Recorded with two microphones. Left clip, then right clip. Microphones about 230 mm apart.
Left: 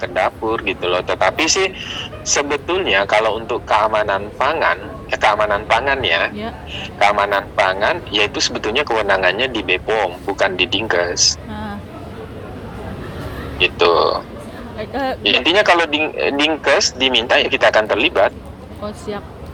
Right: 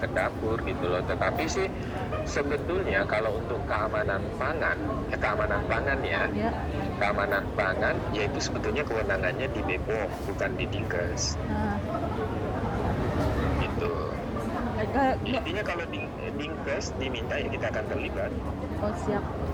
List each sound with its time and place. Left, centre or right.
0.0 s speech: left
13.6 s speech: left